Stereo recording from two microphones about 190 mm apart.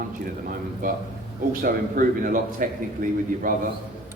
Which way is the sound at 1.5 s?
50° right (ahead or behind).